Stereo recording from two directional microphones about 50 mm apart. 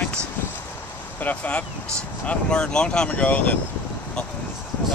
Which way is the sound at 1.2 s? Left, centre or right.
Left.